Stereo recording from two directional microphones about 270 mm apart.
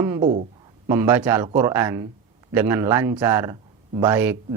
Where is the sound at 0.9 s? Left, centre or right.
Centre.